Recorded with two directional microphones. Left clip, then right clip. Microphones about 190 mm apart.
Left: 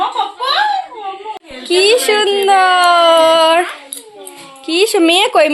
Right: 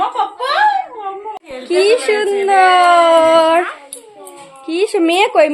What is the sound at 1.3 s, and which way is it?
Speech, centre (ahead or behind).